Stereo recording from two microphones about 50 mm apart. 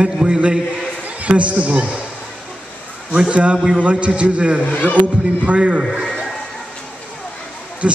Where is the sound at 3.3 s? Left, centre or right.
Right.